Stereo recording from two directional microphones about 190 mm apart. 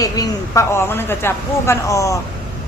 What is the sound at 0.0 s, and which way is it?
A woman's voice, 15° left (ahead or behind).